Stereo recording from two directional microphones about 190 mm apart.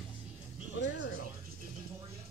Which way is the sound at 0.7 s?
70° left (ahead or behind).